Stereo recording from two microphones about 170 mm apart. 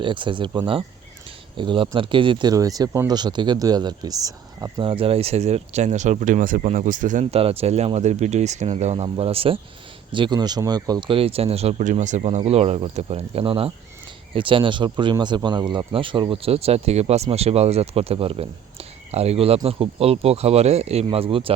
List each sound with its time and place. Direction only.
0.0 s speech: 30° right (ahead or behind)